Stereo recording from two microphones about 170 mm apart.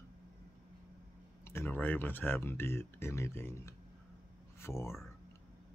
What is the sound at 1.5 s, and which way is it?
Speech, 10° left (ahead or behind).